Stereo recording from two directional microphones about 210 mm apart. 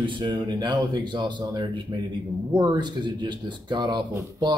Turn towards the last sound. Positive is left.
turn(degrees=-20)  # may be behind; listen again after turning